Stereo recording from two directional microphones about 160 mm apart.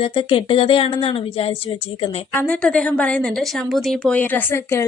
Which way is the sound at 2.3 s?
5° left (ahead or behind).